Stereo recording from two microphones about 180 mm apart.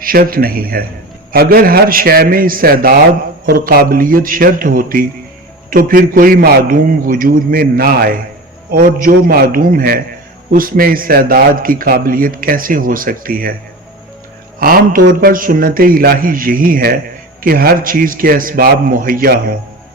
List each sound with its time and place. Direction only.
0.0 s a man's voice: 55° right (ahead or behind)
14.6 s a man's voice: 55° right (ahead or behind)